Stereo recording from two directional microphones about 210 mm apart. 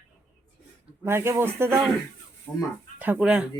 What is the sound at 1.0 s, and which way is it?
Speech, 10° right (ahead or behind).